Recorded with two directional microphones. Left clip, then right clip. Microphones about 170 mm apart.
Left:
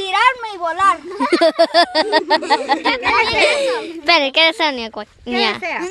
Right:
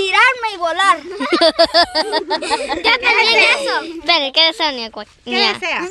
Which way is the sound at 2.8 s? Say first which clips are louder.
Right 3 dB; 30° right (ahead or behind).